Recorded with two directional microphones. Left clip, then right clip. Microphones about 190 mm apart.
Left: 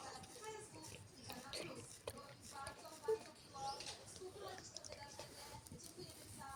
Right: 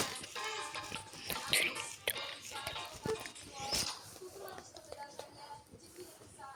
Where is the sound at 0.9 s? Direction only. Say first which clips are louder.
Right 13 dB; centre (ahead or behind).